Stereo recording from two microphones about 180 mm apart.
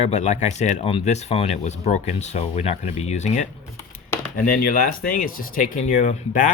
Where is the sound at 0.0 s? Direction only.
40° left (ahead or behind).